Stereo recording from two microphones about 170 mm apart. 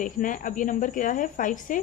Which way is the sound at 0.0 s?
50° left (ahead or behind).